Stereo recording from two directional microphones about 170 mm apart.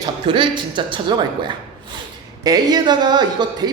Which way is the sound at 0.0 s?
30° right (ahead or behind).